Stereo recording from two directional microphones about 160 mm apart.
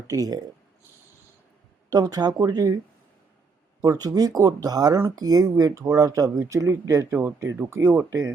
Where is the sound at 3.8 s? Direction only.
25° right (ahead or behind).